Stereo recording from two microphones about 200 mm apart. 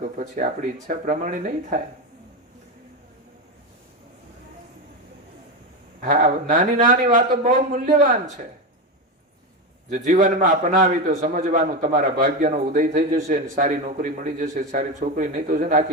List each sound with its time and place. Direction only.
0.0 s a man's voice: 40° right (ahead or behind)
6.0 s a man's voice: 40° right (ahead or behind)
9.9 s a man's voice: 40° right (ahead or behind)